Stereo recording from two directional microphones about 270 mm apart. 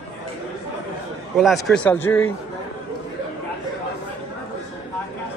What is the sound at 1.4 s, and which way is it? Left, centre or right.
Speech, centre.